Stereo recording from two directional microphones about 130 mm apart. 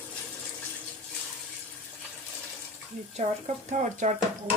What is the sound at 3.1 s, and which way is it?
Speech, 60° right (ahead or behind).